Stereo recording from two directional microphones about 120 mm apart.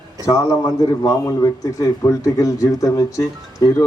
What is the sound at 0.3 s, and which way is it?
A man's voice, 30° left (ahead or behind).